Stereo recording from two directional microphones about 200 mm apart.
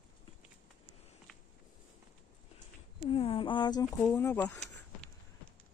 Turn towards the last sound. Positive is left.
turn(degrees=15)  # may be behind; listen again after turning